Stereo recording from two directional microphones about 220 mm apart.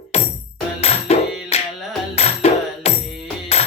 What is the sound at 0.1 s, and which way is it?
Music, 30° left (ahead or behind).